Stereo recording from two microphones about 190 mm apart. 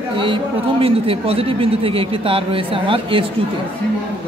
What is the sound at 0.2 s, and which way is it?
A man's voice, 30° right (ahead or behind).